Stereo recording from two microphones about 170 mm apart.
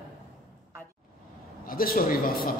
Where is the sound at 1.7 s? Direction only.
55° left (ahead or behind).